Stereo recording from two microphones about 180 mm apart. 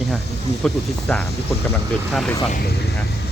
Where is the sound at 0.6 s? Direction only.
5° left (ahead or behind).